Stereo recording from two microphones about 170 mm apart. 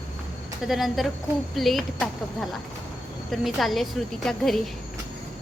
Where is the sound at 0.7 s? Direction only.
Centre (ahead or behind).